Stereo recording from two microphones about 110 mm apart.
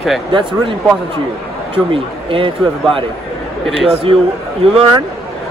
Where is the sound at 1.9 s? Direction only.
55° right (ahead or behind).